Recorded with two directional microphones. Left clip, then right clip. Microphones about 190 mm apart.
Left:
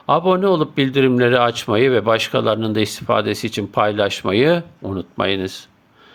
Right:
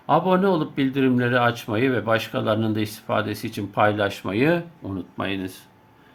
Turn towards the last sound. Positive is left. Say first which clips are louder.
# left 8 dB
turn(degrees=40)  # may be behind; listen again after turning